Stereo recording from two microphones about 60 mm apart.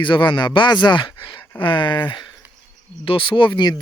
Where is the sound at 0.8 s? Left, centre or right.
Left.